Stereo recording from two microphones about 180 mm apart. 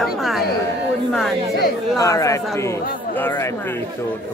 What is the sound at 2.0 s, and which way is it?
Speech, 15° left (ahead or behind).